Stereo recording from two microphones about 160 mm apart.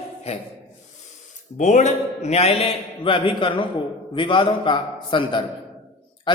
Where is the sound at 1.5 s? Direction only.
50° left (ahead or behind).